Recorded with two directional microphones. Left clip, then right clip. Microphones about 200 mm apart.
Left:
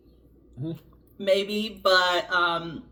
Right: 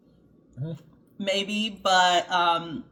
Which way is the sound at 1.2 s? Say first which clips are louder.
Left 3 dB; 15° right (ahead or behind).